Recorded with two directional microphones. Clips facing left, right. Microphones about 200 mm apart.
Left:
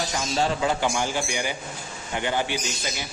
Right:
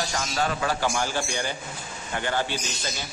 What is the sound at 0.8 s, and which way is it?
Mantra, 15° left (ahead or behind).